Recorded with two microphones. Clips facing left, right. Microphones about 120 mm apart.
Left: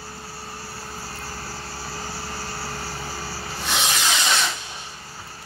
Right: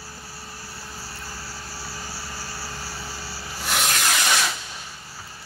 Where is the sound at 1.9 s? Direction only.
55° left (ahead or behind).